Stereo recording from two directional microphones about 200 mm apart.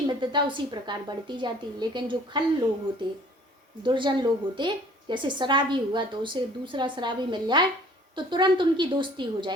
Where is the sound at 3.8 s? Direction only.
25° right (ahead or behind).